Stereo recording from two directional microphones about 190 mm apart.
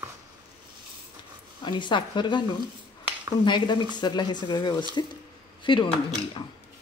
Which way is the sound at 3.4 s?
25° left (ahead or behind).